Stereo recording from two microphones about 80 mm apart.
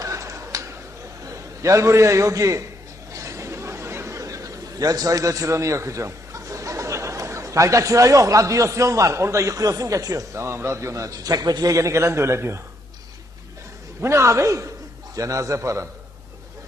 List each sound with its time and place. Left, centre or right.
0.0 s a sound: right
1.2 s a man's voice: right
11.8 s a man's voice: right
14.0 s a man's voice: right